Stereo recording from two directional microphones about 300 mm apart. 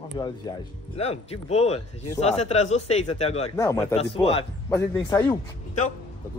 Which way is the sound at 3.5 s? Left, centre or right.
Centre.